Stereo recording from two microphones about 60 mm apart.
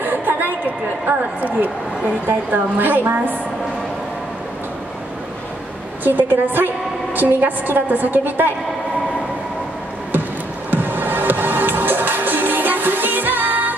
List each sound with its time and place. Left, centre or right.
0.0 s a sound: right
1.0 s a woman's voice: right
6.0 s a woman's voice: right
10.7 s music: right